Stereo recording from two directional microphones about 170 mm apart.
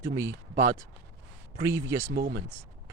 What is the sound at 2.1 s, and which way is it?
Speech, 60° right (ahead or behind).